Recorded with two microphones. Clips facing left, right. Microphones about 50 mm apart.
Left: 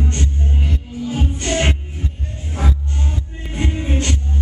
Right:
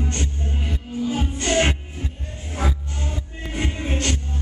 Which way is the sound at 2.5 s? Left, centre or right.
Centre.